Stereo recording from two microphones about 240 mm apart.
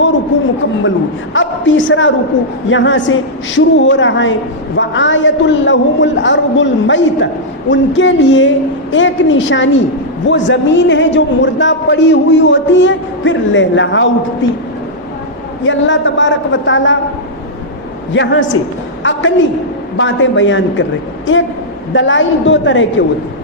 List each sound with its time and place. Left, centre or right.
0.9 s a man's voice: left
15.6 s a man's voice: left
18.1 s a man's voice: left